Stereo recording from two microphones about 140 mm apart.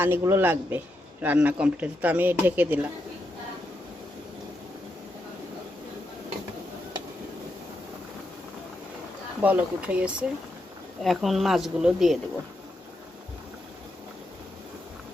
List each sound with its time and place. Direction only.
0.0 s speech: 15° right (ahead or behind)
9.4 s speech: 10° right (ahead or behind)